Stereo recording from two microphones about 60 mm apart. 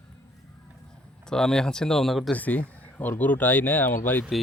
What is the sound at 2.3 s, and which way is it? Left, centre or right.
Speech, left.